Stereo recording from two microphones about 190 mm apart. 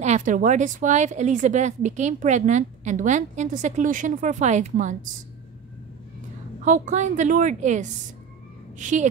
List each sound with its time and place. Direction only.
0.0 s speech: 40° right (ahead or behind)
6.6 s speech: 40° right (ahead or behind)